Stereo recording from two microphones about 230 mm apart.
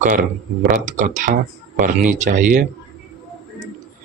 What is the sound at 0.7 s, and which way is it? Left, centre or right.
Speech, right.